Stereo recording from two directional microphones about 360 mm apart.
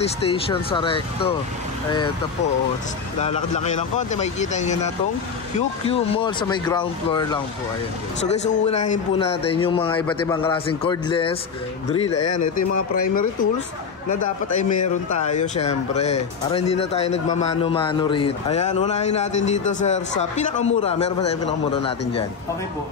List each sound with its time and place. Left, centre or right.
0.0 s a man's voice: centre
3.2 s a man's voice: centre
8.6 s a man's voice: centre
12.1 s speech: left
14.6 s speech: left
15.2 s a man's voice: centre